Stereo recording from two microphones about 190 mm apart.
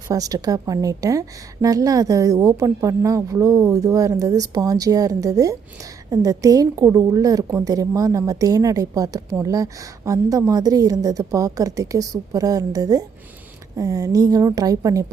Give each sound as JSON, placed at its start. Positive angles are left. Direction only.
{"t": 0.1, "sound": "a woman's voice", "side_deg": -20}